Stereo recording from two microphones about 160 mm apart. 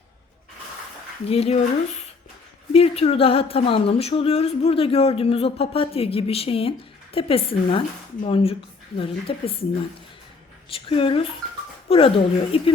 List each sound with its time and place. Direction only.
1.3 s speech: 40° left (ahead or behind)
2.7 s speech: 40° left (ahead or behind)
10.7 s speech: 35° left (ahead or behind)